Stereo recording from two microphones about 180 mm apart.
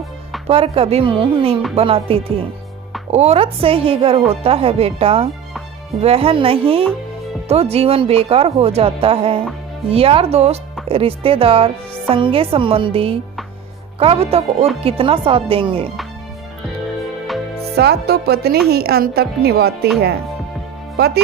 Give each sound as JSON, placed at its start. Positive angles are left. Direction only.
{"t": 0.4, "sound": "a woman's voice", "side_deg": -35}
{"t": 17.7, "sound": "a woman's voice", "side_deg": -60}